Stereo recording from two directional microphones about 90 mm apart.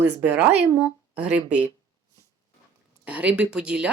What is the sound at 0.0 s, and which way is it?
A woman's voice, 15° right (ahead or behind).